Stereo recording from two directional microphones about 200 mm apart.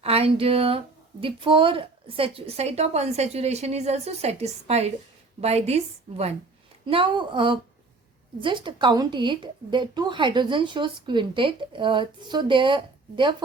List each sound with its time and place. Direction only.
0.0 s a woman's voice: 30° right (ahead or behind)